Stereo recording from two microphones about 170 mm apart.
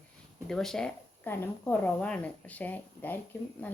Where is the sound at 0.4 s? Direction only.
5° left (ahead or behind).